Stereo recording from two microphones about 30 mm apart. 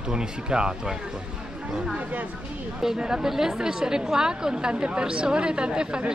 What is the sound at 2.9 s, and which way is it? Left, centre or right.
Speech, right.